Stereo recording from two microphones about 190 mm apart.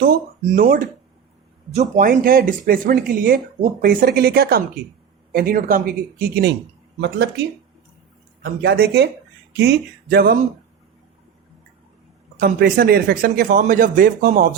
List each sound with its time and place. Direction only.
0.0 s speech: 50° right (ahead or behind)
12.4 s speech: 55° right (ahead or behind)